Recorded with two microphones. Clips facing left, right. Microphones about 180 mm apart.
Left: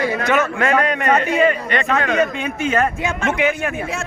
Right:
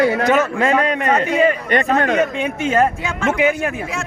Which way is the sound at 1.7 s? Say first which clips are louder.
Right 3 dB; 45° right (ahead or behind).